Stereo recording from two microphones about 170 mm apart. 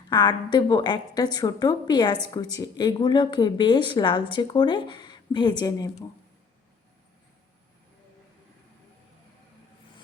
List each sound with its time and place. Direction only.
0.1 s speech: 25° left (ahead or behind)